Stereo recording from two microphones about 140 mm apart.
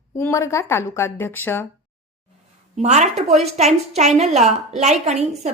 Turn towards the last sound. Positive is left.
turn(degrees=-50)  # may be behind; listen again after turning